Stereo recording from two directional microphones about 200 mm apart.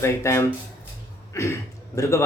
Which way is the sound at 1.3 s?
15° left (ahead or behind).